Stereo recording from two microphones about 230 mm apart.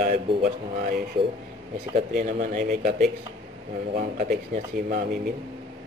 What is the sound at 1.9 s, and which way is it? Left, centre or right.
Speech, right.